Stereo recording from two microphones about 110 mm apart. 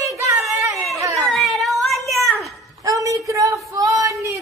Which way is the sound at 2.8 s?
30° right (ahead or behind).